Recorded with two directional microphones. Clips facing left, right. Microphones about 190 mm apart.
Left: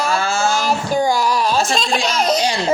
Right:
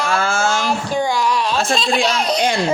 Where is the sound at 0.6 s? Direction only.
40° left (ahead or behind).